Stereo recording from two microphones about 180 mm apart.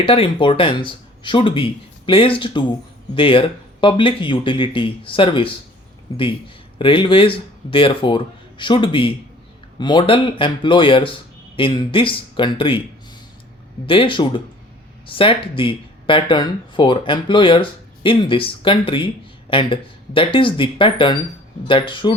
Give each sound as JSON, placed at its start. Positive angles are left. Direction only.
{"t": 0.0, "sound": "speech", "side_deg": 30}
{"t": 13.8, "sound": "speech", "side_deg": 30}